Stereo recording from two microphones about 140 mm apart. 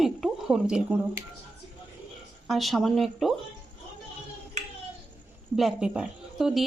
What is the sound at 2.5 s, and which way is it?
Speech, centre (ahead or behind).